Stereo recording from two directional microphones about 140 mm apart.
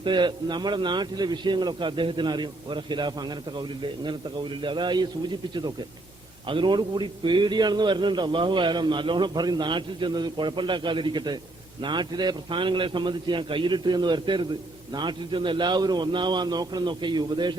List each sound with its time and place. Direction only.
0.0 s a man's voice: 35° right (ahead or behind)